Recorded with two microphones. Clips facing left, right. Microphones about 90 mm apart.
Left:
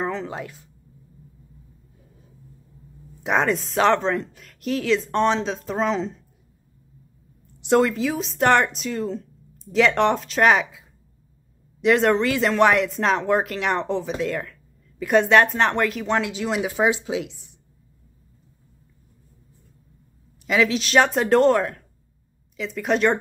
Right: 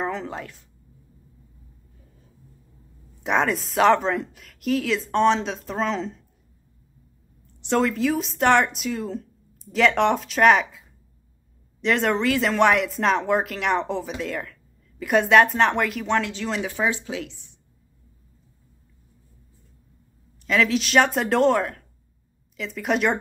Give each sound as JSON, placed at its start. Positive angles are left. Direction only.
{"t": 0.0, "sound": "speech", "side_deg": 0}
{"t": 3.3, "sound": "speech", "side_deg": 0}
{"t": 7.6, "sound": "speech", "side_deg": 5}
{"t": 20.4, "sound": "speech", "side_deg": 5}